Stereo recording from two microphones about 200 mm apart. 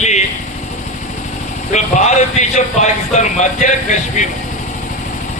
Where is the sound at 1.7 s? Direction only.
35° left (ahead or behind).